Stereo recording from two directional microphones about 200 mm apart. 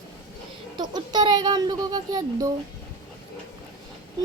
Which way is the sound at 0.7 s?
20° right (ahead or behind).